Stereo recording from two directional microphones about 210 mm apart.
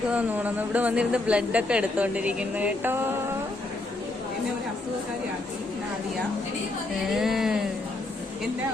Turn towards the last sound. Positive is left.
turn(degrees=0)  # may be behind; listen again after turning